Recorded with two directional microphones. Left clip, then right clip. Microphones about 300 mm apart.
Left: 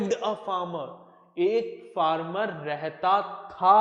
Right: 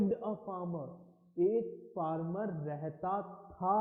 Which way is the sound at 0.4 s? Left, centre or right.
Left.